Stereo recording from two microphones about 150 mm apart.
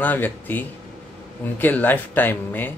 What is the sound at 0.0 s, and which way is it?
A man's voice, 10° left (ahead or behind).